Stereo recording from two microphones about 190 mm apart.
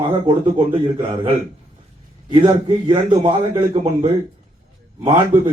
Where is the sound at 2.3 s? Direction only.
25° right (ahead or behind).